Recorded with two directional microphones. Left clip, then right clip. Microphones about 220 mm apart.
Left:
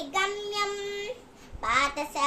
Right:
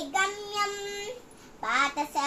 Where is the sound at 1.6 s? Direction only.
15° left (ahead or behind).